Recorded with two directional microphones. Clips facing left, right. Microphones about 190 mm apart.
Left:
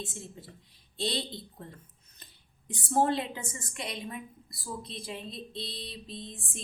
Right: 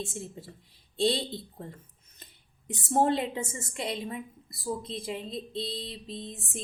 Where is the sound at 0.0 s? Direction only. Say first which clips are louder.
Right 4 dB; 25° right (ahead or behind).